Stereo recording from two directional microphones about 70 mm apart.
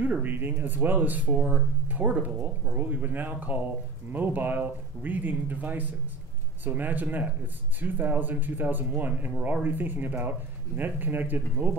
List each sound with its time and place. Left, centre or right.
0.0 s speech: right